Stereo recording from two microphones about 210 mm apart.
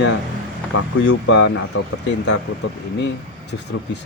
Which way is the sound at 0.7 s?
90° left.